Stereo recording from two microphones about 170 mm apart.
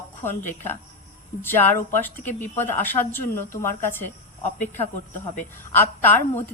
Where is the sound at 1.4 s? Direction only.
10° left (ahead or behind).